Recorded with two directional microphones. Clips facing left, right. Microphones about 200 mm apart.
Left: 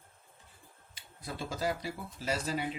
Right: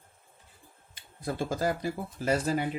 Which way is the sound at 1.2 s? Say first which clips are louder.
Right 6 dB; 50° right (ahead or behind).